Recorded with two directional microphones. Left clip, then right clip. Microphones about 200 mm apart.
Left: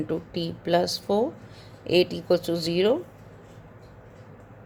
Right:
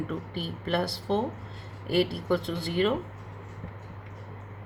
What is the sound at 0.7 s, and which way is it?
Speech, 35° left (ahead or behind).